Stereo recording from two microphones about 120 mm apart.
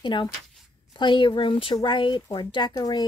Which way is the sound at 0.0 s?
40° left (ahead or behind).